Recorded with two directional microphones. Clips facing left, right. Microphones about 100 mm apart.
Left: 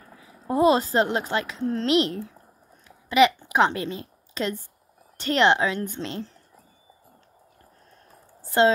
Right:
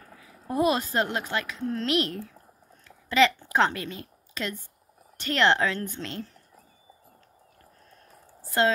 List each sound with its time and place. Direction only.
0.1 s a child's voice: 25° left (ahead or behind)
8.5 s speech: 25° left (ahead or behind)